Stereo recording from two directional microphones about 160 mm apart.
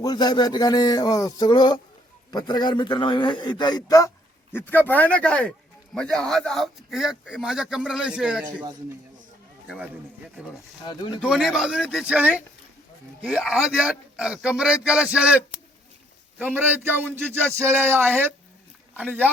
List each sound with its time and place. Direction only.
0.0 s a man's voice: 25° left (ahead or behind)
4.5 s a man's voice: 10° left (ahead or behind); by 8.4 s 5° right (ahead or behind)
9.6 s speech: 10° right (ahead or behind)
11.2 s a man's voice: 5° right (ahead or behind)
16.4 s a man's voice: 10° right (ahead or behind)